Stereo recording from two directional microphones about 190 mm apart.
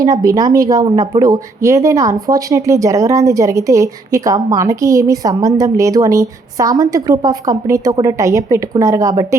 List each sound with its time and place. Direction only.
0.0 s a woman's voice: 20° right (ahead or behind)